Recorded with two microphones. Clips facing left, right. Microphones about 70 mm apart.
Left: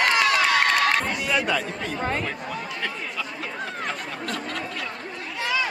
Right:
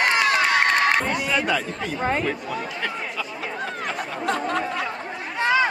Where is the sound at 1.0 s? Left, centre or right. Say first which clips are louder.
Right 2 dB; centre.